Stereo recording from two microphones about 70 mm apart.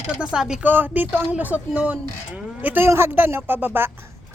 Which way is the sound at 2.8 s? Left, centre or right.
Right.